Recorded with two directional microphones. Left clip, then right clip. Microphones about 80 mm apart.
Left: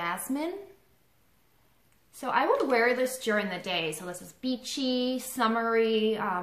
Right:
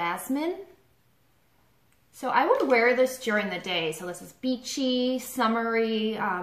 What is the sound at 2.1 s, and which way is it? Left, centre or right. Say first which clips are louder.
A woman's voice: right 3 dB; left.